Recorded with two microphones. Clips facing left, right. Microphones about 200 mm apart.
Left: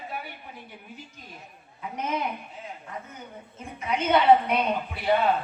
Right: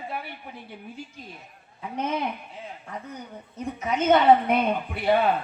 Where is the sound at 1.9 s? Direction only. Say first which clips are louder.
Right 2 dB; 30° right (ahead or behind).